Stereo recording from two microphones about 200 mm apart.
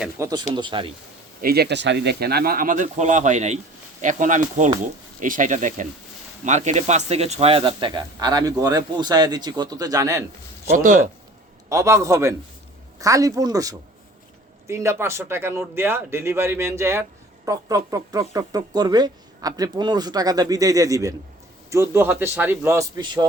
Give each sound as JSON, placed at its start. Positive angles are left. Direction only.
{"t": 0.0, "sound": "a man's voice", "side_deg": -15}
{"t": 1.4, "sound": "speech", "side_deg": -50}
{"t": 10.7, "sound": "speech", "side_deg": -40}
{"t": 11.7, "sound": "a man's voice", "side_deg": -15}